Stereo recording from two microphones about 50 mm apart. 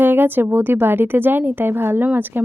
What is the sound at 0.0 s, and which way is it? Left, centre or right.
Speech, right.